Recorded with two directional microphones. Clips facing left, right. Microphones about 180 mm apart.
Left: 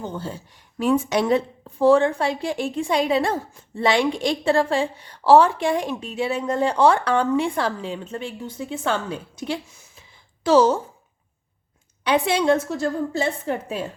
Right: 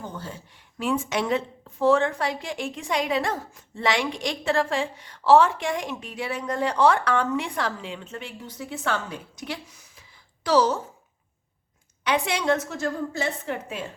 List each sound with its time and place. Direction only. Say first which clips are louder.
0.0 s a woman's voice: left 6 dB; 25° left (ahead or behind)
12.0 s a woman's voice: left 5 dB; 30° left (ahead or behind)